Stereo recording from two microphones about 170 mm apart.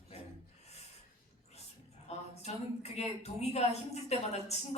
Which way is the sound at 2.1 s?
40° left (ahead or behind).